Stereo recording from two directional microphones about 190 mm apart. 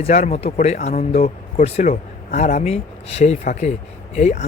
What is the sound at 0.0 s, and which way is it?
Speech, 35° left (ahead or behind).